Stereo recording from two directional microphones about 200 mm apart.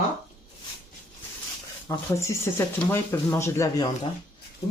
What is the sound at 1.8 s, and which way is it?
Speech, 15° left (ahead or behind).